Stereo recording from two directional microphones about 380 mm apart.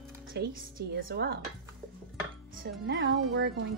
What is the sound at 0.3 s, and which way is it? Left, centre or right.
Speech, right.